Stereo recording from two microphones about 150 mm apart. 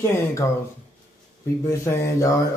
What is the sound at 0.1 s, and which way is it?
Mantra, 20° left (ahead or behind).